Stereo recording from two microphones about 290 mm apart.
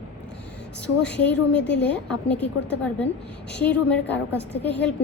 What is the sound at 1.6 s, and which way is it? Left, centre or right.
Speech, left.